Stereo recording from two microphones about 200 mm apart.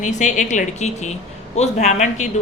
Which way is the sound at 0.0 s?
40° left (ahead or behind).